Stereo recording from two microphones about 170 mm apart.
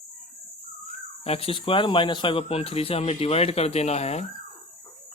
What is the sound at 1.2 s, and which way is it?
Speech, 35° left (ahead or behind).